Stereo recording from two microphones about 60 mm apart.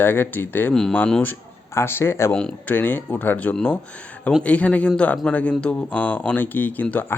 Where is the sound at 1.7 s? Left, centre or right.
Left.